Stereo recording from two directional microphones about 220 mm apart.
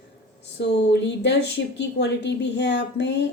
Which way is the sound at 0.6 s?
55° left (ahead or behind).